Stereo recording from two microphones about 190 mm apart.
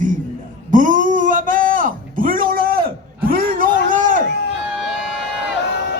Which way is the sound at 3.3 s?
50° right (ahead or behind).